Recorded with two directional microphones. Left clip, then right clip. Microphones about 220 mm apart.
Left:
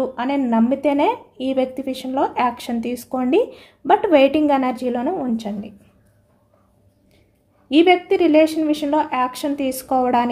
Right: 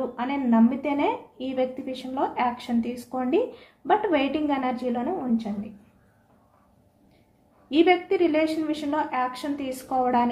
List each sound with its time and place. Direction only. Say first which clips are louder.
0.1 s a woman's voice: left 5 dB; 50° left (ahead or behind)
7.7 s a woman's voice: left 6 dB; 55° left (ahead or behind)